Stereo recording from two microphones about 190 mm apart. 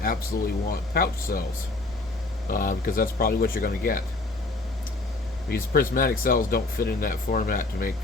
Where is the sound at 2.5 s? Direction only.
45° left (ahead or behind).